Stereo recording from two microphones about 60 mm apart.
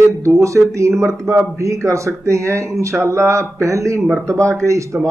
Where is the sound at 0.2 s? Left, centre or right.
Right.